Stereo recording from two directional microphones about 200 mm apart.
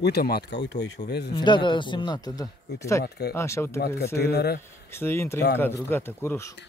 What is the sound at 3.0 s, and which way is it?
Speech, 55° left (ahead or behind).